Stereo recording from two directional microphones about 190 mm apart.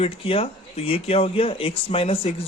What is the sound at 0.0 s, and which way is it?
Speech, 30° left (ahead or behind).